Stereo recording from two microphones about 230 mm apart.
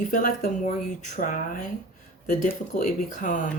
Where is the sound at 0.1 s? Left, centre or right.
Left.